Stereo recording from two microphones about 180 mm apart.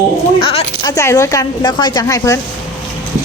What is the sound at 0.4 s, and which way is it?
Speech, 30° left (ahead or behind).